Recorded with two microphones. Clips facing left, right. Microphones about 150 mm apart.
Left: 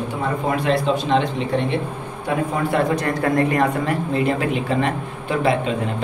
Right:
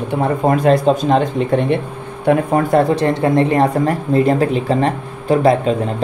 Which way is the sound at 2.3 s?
60° right (ahead or behind).